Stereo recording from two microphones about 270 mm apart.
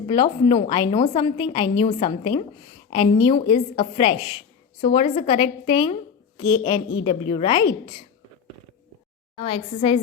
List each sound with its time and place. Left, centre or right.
0.1 s a woman's voice: centre
9.4 s a woman's voice: left